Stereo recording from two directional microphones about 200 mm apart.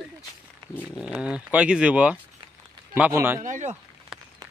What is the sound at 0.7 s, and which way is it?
Speech, centre (ahead or behind).